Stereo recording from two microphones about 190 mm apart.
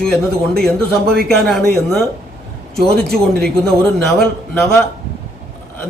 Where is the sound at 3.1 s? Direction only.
5° left (ahead or behind).